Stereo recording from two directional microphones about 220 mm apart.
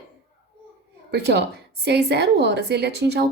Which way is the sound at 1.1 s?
50° right (ahead or behind).